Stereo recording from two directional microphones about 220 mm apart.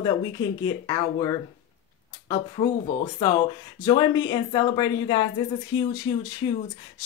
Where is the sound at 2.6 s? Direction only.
25° left (ahead or behind).